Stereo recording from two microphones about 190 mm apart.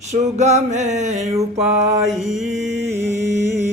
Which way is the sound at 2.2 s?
Centre (ahead or behind).